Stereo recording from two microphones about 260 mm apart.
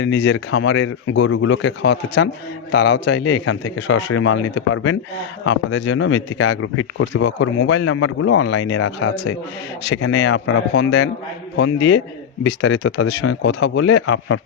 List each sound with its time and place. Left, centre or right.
0.0 s speech: left